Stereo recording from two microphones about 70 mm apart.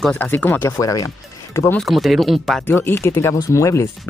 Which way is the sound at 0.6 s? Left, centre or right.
Left.